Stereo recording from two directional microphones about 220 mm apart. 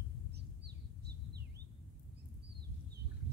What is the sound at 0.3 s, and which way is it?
Bird, 50° right (ahead or behind).